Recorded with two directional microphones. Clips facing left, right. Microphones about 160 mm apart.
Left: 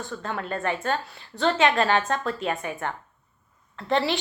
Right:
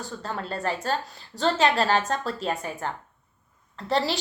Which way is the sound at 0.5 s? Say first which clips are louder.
Left 1 dB; 35° right (ahead or behind).